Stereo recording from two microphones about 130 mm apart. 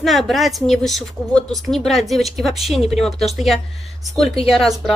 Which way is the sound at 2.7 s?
50° left (ahead or behind).